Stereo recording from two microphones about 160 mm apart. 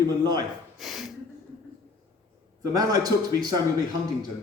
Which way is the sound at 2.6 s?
25° right (ahead or behind).